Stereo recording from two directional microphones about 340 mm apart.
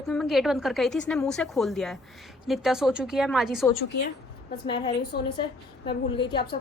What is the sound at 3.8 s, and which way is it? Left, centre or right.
Speech, left.